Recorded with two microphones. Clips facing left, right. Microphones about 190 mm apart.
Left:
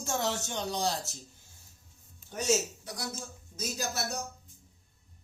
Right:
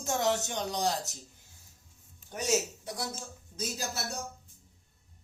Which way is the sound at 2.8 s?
25° right (ahead or behind).